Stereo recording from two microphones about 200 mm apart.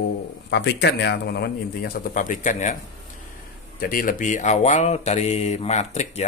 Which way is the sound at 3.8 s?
45° left (ahead or behind).